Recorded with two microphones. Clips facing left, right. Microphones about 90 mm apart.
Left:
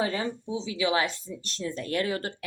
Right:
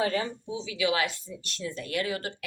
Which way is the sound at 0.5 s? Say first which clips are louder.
Left 1 dB; 30° left (ahead or behind).